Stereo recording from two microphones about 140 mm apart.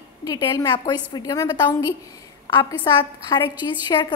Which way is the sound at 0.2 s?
30° left (ahead or behind).